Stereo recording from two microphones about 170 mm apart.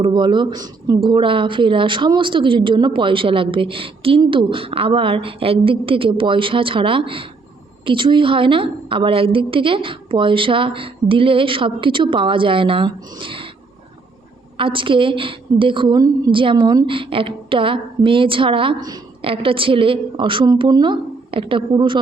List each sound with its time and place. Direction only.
0.0 s a woman's voice: 25° right (ahead or behind)
14.6 s a woman's voice: 30° right (ahead or behind)